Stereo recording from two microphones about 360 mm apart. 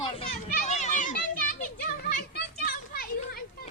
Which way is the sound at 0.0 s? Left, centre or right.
Centre.